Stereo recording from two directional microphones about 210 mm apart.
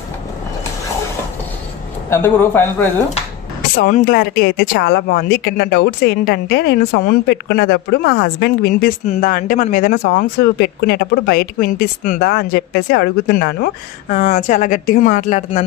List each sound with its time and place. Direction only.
2.0 s a man's voice: 10° left (ahead or behind)
3.7 s speech: 45° left (ahead or behind)
14.1 s speech: 35° left (ahead or behind)